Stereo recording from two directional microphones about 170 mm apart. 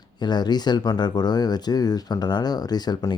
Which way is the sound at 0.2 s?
25° left (ahead or behind).